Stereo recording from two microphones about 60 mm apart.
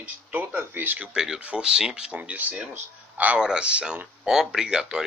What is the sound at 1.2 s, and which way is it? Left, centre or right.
Speech, centre.